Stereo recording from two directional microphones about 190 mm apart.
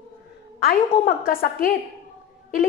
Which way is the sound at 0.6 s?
50° left (ahead or behind).